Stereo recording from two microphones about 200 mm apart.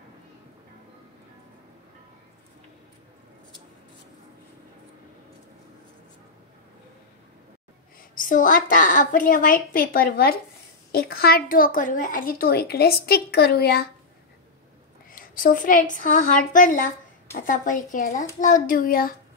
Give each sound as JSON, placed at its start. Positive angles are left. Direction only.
{"t": 8.1, "sound": "speech", "side_deg": 40}
{"t": 15.0, "sound": "a woman's voice", "side_deg": 45}